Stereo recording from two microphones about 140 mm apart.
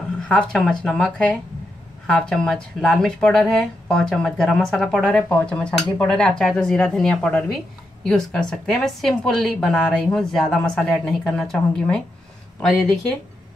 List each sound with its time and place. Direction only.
0.3 s a woman's voice: 5° left (ahead or behind)